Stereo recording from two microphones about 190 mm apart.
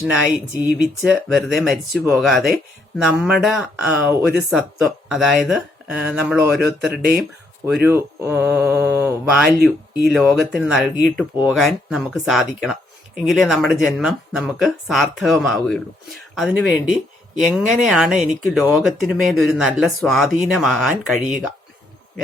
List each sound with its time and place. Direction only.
0.6 s speech: 5° right (ahead or behind)